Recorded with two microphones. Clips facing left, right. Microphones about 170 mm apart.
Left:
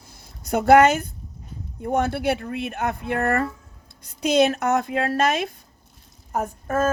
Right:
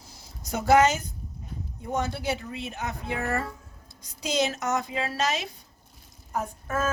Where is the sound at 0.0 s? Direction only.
55° left (ahead or behind).